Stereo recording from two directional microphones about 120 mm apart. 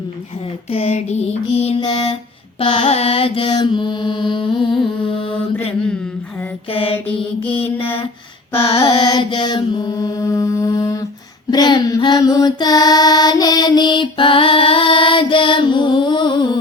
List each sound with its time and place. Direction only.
0.7 s a sound: 55° left (ahead or behind)
1.8 s mantra: 40° left (ahead or behind)
2.6 s mantra: 50° left (ahead or behind)
6.7 s mantra: 50° left (ahead or behind)
7.6 s mantra: 20° left (ahead or behind)
8.5 s mantra: 55° left (ahead or behind)
9.0 s mantra: 35° left (ahead or behind)